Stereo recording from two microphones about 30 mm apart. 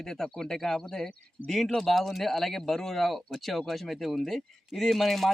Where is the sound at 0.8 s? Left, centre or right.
Left.